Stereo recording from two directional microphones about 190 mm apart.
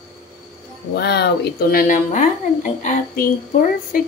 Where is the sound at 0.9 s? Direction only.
60° left (ahead or behind).